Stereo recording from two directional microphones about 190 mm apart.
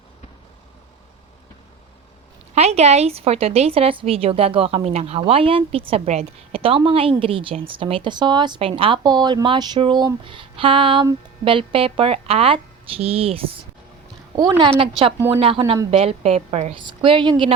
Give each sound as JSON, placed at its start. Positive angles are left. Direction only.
{"t": 2.6, "sound": "a woman's voice", "side_deg": -35}
{"t": 14.8, "sound": "a woman's voice", "side_deg": -30}